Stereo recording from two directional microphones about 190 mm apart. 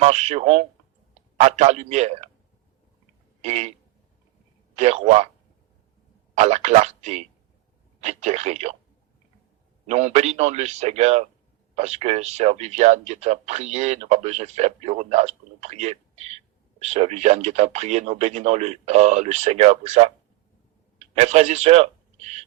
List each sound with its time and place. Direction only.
0.0 s speech: 35° right (ahead or behind)
3.4 s a sound: 35° right (ahead or behind)
4.7 s speech: 35° right (ahead or behind)
6.3 s speech: 35° right (ahead or behind)
9.8 s speech: 35° right (ahead or behind)